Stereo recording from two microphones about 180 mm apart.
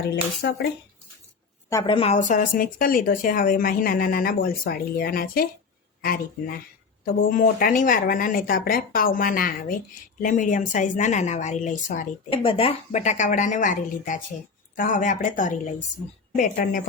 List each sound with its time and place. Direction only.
0.0 s speech: 70° left (ahead or behind)
1.7 s a woman's voice: 30° left (ahead or behind)
12.3 s a woman's voice: 30° left (ahead or behind); by 16.8 s 50° left (ahead or behind)